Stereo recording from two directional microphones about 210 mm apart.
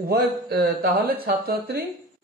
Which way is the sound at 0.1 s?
50° right (ahead or behind).